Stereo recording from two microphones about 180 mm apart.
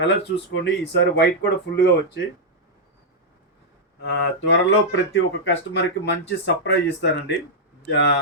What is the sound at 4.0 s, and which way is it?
Speech, 90° left.